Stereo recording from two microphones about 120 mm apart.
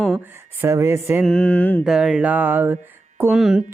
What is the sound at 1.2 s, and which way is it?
Mantra, 10° left (ahead or behind).